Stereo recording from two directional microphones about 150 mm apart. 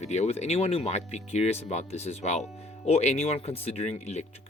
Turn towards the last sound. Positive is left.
turn(degrees=45)  # may be behind; listen again after turning